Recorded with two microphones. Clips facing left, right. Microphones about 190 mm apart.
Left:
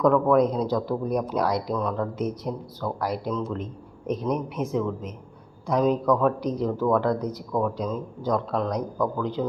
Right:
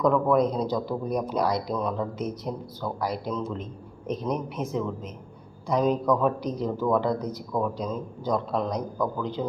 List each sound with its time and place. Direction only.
0.0 s a man's voice: centre (ahead or behind)
1.7 s a man's voice: 5° right (ahead or behind)